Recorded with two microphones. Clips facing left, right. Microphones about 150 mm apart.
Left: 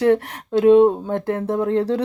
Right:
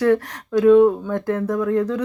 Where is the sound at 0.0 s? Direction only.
25° left (ahead or behind).